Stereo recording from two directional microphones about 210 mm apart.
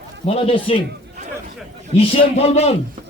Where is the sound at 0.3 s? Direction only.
25° left (ahead or behind).